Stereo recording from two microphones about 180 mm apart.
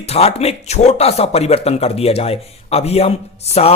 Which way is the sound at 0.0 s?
35° left (ahead or behind).